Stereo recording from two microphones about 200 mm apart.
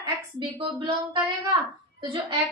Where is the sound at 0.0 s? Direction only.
25° right (ahead or behind).